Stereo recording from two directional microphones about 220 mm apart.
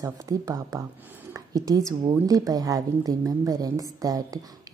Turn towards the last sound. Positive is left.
turn(degrees=-15)  # may be behind; listen again after turning